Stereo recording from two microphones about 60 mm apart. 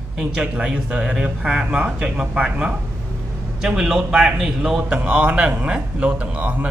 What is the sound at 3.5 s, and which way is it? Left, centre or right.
Speech, centre.